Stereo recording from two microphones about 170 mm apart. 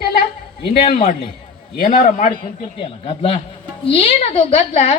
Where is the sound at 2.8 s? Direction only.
30° left (ahead or behind).